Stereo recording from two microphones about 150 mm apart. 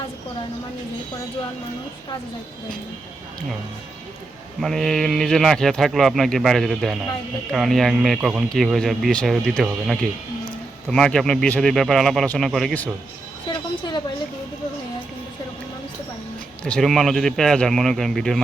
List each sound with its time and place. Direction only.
4.6 s speech: centre (ahead or behind)
13.5 s a sound: 30° left (ahead or behind)
16.6 s speech: 5° left (ahead or behind)